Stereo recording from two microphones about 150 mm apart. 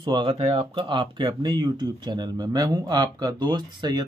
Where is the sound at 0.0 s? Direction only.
35° right (ahead or behind).